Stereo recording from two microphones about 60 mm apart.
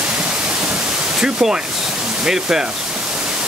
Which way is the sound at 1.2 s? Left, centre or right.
Centre.